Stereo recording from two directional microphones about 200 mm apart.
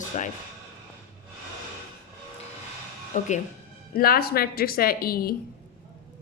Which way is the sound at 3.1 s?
40° left (ahead or behind).